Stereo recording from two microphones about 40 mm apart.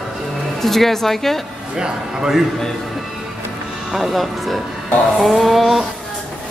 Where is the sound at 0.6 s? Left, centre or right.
Centre.